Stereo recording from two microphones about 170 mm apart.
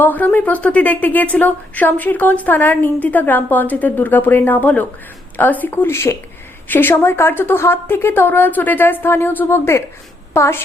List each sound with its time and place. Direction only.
0.0 s a woman's voice: 10° left (ahead or behind)